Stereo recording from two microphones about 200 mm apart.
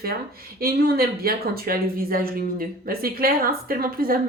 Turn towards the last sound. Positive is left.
turn(degrees=-45)  # may be behind; listen again after turning